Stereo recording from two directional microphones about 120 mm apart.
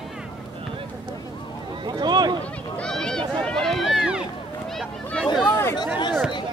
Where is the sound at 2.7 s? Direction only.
5° left (ahead or behind).